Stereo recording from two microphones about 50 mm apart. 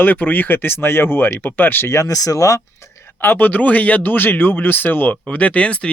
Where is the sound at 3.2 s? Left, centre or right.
Left.